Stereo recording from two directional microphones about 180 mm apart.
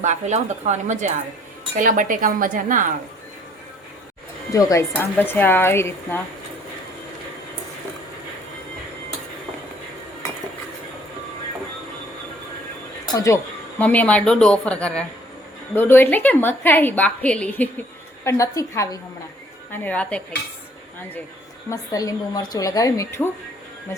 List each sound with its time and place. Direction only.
0.0 s speech: 40° right (ahead or behind)
4.5 s a woman's voice: 15° left (ahead or behind)
13.1 s a woman's voice: 15° left (ahead or behind)
21.7 s a woman's voice: 20° left (ahead or behind)